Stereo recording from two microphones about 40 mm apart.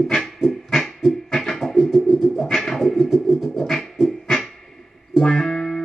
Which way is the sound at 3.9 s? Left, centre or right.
Centre.